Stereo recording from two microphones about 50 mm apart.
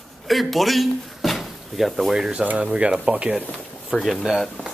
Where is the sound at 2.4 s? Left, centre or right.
Right.